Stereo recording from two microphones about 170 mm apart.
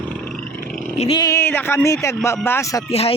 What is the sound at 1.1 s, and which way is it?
A man's voice, 20° left (ahead or behind).